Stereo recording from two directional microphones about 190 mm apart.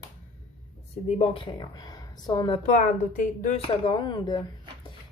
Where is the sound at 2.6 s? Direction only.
40° left (ahead or behind).